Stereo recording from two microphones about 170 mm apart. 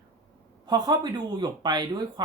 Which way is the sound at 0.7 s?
25° right (ahead or behind).